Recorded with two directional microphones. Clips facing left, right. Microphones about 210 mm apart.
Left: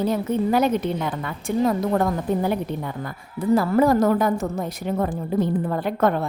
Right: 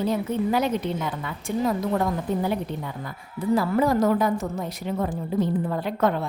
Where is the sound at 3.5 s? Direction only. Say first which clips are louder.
Left 4 dB; 50° left (ahead or behind).